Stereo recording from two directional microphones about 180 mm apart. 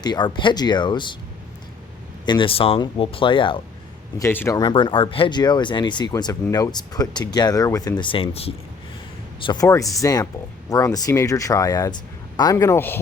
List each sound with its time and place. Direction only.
0.0 s speech: 25° left (ahead or behind)
2.2 s speech: 25° left (ahead or behind)
4.2 s speech: 15° left (ahead or behind); by 8.5 s 35° left (ahead or behind)
9.5 s a man's voice: 20° left (ahead or behind)